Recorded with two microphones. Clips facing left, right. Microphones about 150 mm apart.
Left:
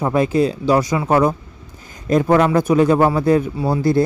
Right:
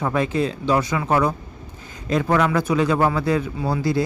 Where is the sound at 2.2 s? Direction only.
35° left (ahead or behind).